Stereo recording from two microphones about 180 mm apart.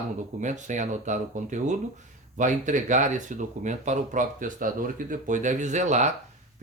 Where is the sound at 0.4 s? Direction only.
45° right (ahead or behind).